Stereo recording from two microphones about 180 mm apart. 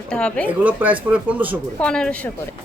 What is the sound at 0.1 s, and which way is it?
Speech, 5° left (ahead or behind).